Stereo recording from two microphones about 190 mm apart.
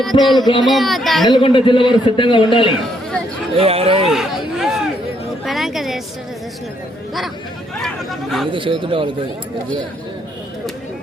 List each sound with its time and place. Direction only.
0.0 s speech: centre (ahead or behind)
0.3 s a man's voice: 20° left (ahead or behind)
0.6 s speech: centre (ahead or behind)
1.3 s a man's voice: 25° left (ahead or behind)
3.6 s speech: 30° right (ahead or behind)
4.0 s a sound: centre (ahead or behind)
7.8 s speech: centre (ahead or behind)
8.5 s speech: 25° right (ahead or behind)